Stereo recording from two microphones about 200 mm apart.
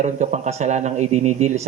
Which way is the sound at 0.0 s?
35° right (ahead or behind).